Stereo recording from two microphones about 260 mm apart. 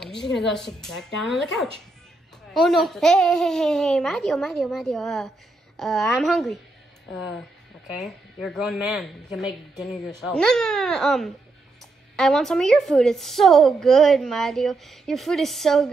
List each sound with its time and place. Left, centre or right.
0.2 s a woman's voice: left
0.5 s a woman's voice: centre
2.6 s a woman's voice: centre
7.9 s a woman's voice: centre